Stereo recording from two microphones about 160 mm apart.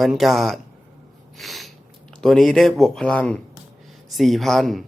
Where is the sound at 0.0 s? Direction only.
Centre (ahead or behind).